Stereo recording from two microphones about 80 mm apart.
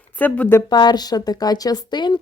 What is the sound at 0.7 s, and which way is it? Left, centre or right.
A woman's voice, left.